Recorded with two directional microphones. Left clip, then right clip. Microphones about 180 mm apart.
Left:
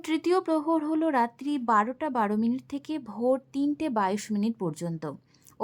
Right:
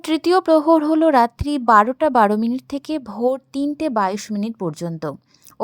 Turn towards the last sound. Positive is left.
turn(degrees=-35)  # may be behind; listen again after turning